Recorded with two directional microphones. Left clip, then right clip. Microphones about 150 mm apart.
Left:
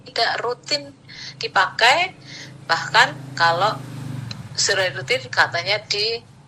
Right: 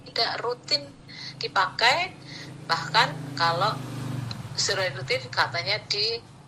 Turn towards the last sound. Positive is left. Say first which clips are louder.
# left 5 dB
turn(degrees=25)  # may be behind; listen again after turning